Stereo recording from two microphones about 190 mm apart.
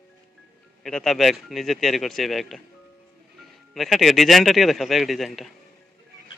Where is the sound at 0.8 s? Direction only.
Centre (ahead or behind).